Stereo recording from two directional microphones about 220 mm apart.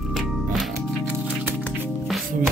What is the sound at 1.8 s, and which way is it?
Music, 10° right (ahead or behind).